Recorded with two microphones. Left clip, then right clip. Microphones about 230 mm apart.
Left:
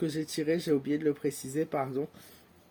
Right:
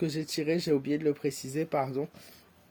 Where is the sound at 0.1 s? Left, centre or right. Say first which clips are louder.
Even; right.